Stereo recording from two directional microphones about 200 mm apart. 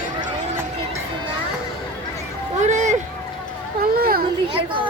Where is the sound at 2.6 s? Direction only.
35° right (ahead or behind).